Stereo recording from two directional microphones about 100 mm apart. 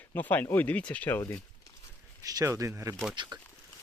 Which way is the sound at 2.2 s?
35° right (ahead or behind).